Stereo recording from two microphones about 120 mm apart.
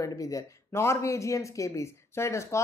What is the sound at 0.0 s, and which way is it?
Speech, 30° left (ahead or behind).